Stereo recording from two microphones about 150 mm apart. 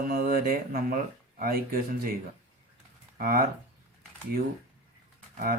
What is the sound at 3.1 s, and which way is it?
Speech, 75° right (ahead or behind).